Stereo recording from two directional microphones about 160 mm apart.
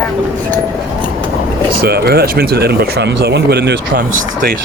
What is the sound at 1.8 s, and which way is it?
Speech, 80° right.